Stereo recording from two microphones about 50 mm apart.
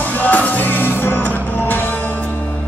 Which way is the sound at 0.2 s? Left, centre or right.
Left.